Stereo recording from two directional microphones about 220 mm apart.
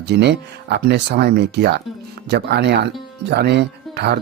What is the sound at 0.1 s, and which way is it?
Speech, 50° right (ahead or behind).